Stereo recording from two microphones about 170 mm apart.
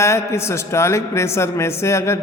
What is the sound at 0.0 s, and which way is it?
A man's voice, 15° left (ahead or behind).